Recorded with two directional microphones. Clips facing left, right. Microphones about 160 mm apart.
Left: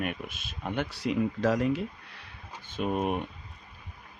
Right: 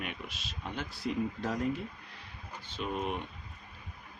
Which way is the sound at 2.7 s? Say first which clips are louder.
Left 6 dB; 50° left (ahead or behind).